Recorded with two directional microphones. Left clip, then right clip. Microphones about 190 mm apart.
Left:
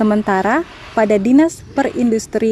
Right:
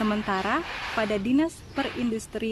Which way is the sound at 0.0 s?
30° left (ahead or behind).